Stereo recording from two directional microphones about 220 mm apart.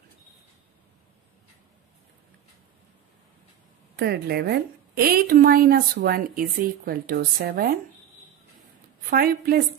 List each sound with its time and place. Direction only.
3.9 s a woman's voice: 45° right (ahead or behind)
9.1 s a woman's voice: 40° right (ahead or behind)